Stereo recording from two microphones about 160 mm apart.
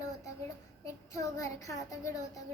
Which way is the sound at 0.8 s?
20° left (ahead or behind).